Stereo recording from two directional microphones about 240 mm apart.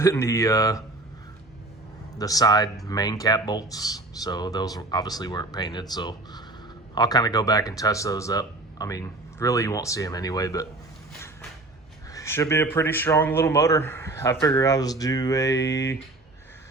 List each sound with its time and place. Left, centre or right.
0.0 s speech: centre
2.1 s speech: centre
12.1 s speech: centre